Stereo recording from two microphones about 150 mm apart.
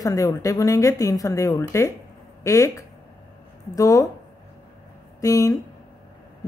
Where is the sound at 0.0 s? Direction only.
20° left (ahead or behind).